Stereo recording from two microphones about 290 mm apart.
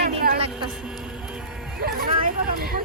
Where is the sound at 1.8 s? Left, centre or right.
Right.